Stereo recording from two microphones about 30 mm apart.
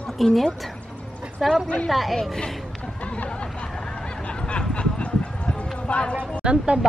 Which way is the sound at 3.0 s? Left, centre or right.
Left.